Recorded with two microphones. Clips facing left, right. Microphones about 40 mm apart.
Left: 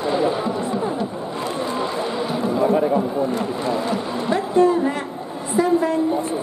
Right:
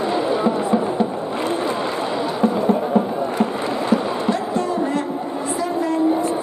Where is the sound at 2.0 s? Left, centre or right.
Centre.